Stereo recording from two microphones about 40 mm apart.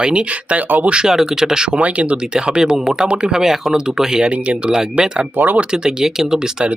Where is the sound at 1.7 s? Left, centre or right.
Right.